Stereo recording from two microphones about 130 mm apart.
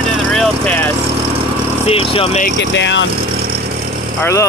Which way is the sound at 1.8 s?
45° left (ahead or behind).